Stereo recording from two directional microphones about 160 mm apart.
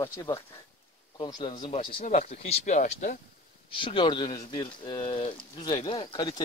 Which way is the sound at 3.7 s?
30° left (ahead or behind).